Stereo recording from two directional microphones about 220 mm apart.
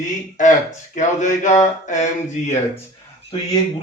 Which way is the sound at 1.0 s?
35° left (ahead or behind).